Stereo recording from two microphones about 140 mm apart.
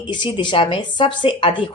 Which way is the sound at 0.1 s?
35° left (ahead or behind).